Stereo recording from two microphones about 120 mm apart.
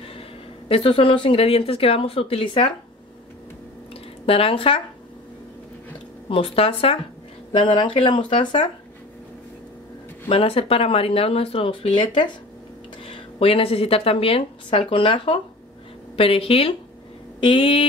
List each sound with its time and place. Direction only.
0.7 s a woman's voice: 50° left (ahead or behind)
3.9 s drip: 50° left (ahead or behind)
6.2 s a woman's voice: 50° left (ahead or behind)
7.5 s speech: 40° left (ahead or behind)
10.2 s a woman's voice: 50° left (ahead or behind)